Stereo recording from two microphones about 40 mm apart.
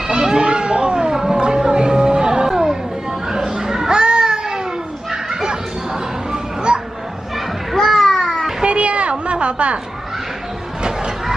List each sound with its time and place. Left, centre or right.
0.1 s a sound: right
1.4 s music: right
3.3 s children playing: centre
6.3 s music: right
7.7 s children playing: centre
8.6 s a sound: right